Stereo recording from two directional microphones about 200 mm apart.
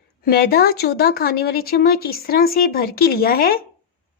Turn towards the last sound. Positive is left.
turn(degrees=45)  # may be behind; listen again after turning